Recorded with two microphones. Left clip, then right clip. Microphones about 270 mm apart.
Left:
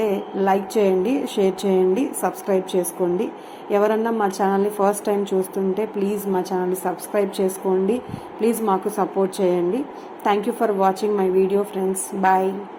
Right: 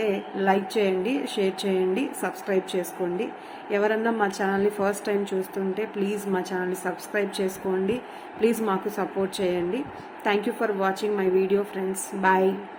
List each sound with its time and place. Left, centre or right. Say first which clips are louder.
0.0 s a woman's voice: left 4 dB; centre